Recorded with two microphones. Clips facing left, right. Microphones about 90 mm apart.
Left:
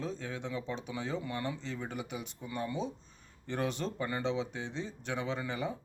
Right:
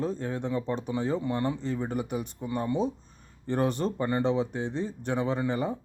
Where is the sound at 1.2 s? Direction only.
30° right (ahead or behind).